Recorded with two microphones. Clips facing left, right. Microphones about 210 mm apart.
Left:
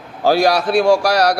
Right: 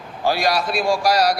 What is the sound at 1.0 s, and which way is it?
Speech, 70° left (ahead or behind).